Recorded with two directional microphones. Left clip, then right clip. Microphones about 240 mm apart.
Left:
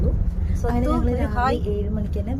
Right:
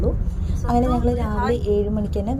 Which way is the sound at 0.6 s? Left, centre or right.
Right.